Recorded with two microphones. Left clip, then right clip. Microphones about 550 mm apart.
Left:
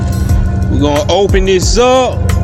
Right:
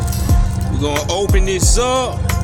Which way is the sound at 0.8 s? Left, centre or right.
Right.